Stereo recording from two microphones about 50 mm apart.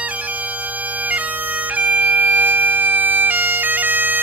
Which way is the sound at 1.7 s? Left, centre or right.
Right.